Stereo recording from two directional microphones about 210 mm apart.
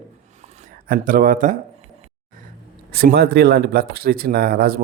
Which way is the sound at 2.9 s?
50° right (ahead or behind).